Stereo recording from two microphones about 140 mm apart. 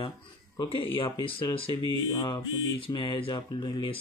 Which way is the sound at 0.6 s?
40° left (ahead or behind).